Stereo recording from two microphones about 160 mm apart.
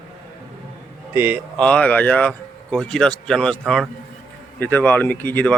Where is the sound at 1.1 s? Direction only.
10° right (ahead or behind).